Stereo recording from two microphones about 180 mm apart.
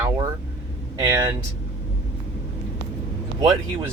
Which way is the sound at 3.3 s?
15° right (ahead or behind).